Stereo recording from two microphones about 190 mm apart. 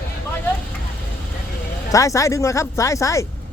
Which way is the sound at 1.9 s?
15° left (ahead or behind).